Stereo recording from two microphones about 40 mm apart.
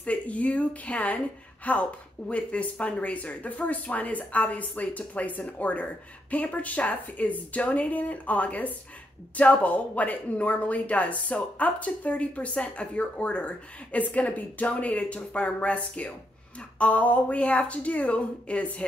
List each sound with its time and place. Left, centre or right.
0.0 s a woman's voice: left